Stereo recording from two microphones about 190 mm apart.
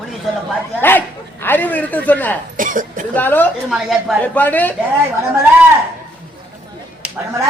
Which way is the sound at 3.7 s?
5° right (ahead or behind).